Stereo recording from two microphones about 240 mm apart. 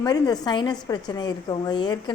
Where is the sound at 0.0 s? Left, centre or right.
Centre.